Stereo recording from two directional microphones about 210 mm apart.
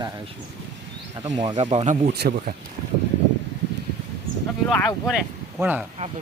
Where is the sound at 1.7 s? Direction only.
35° right (ahead or behind).